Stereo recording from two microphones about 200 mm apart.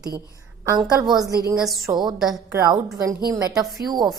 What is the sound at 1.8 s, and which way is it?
Speech, 20° right (ahead or behind).